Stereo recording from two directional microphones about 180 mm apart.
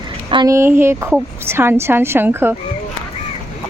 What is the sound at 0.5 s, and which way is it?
A woman's voice, 15° right (ahead or behind).